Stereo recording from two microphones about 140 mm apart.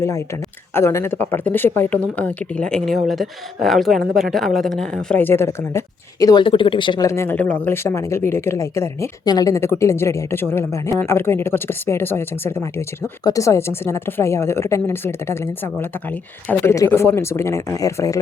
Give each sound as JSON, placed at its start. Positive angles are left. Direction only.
{"t": 0.7, "sound": "speech", "side_deg": 15}
{"t": 7.1, "sound": "a woman's voice", "side_deg": 15}